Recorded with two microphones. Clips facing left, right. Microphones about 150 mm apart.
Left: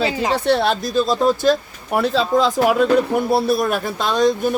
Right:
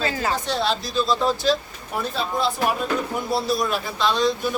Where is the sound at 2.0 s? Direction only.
90° left.